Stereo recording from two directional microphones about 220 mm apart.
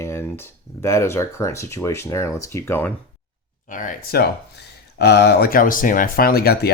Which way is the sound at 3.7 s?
35° left (ahead or behind).